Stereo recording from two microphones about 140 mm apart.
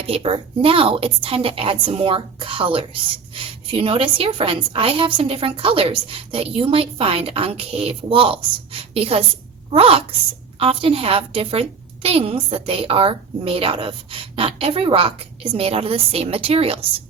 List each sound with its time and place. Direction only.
0.1 s a woman's voice: 45° right (ahead or behind)